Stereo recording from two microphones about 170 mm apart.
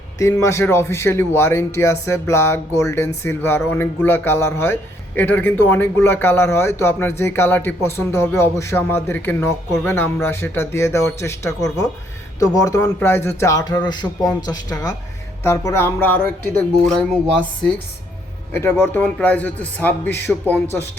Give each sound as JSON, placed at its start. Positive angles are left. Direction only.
{"t": 0.2, "sound": "a man's voice", "side_deg": 20}